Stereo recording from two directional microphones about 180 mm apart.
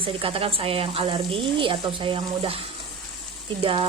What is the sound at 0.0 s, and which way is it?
Speech, 30° right (ahead or behind).